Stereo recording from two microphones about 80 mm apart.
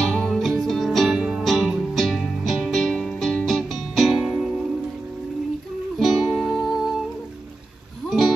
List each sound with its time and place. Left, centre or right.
0.0 s music: centre
5.9 s music: centre